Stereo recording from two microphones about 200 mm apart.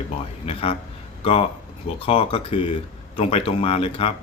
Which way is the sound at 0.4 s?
30° left (ahead or behind).